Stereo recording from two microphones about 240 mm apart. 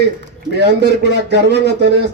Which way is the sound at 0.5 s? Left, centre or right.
Right.